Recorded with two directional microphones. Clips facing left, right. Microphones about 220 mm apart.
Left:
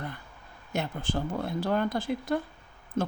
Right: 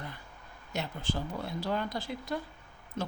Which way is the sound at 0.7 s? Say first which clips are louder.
Left 4 dB; 50° left (ahead or behind).